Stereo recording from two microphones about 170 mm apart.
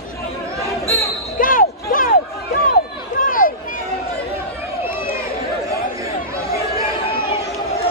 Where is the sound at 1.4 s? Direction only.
55° left (ahead or behind).